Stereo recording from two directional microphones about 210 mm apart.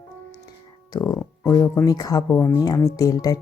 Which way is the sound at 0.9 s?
15° left (ahead or behind).